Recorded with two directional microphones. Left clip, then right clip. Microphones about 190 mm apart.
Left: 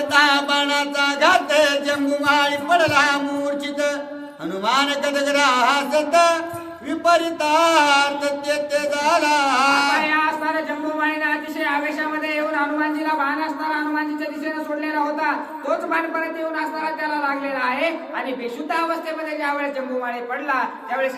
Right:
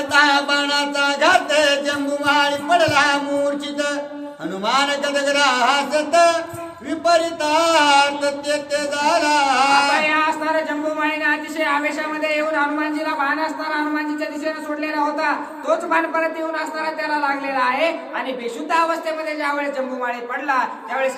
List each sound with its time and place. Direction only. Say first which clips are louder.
0.1 s music: right 1 dB; 20° left (ahead or behind)
4.6 s mantra: right 1 dB; 20° left (ahead or behind)
10.0 s a man's voice: right 1 dB; 10° right (ahead or behind)
20.5 s a man's voice: right 3 dB; 10° right (ahead or behind)